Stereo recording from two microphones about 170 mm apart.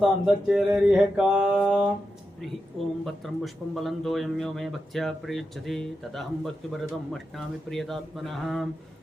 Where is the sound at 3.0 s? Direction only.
Centre (ahead or behind).